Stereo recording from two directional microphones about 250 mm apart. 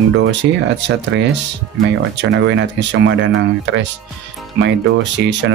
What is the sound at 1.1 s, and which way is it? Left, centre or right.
Speech, right.